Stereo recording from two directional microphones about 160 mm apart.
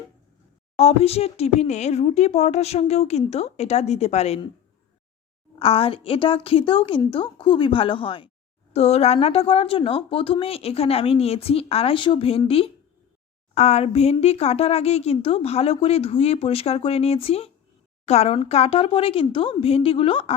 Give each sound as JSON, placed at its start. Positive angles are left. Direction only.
{"t": 0.8, "sound": "speech", "side_deg": 40}
{"t": 5.5, "sound": "a woman's voice", "side_deg": 35}